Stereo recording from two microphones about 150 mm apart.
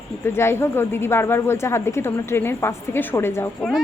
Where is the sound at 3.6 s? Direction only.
Centre (ahead or behind).